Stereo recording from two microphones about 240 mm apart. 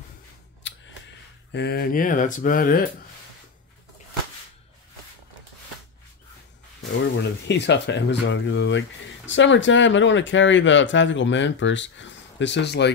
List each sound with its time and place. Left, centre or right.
0.7 s a sound: left
1.5 s speech: left
7.4 s speech: left